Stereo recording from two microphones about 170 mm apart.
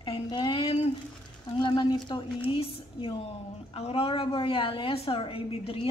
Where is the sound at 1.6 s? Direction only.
30° left (ahead or behind).